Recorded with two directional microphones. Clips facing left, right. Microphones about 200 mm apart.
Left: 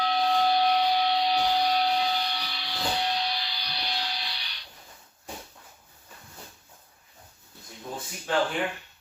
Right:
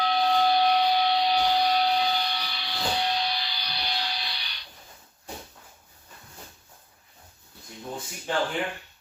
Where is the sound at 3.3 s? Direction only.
75° right (ahead or behind).